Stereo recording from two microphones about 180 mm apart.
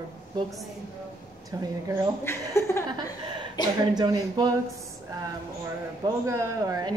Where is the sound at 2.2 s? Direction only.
15° left (ahead or behind).